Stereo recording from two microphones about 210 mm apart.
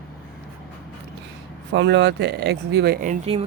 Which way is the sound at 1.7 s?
55° right (ahead or behind).